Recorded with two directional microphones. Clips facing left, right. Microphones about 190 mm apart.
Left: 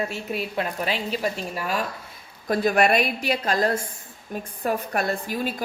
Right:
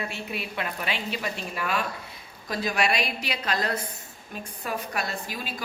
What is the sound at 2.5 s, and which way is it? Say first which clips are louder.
A woman's voice: left 7 dB; 55° left (ahead or behind).